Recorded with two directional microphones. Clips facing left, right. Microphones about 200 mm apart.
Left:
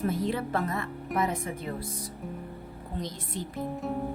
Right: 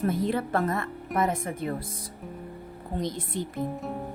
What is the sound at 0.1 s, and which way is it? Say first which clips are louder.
A woman's voice: right 3 dB; 55° right (ahead or behind).